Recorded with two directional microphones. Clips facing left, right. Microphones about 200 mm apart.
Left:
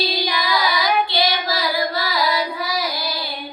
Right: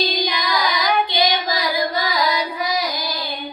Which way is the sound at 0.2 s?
20° right (ahead or behind).